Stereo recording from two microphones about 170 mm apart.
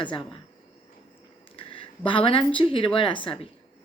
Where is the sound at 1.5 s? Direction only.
35° left (ahead or behind).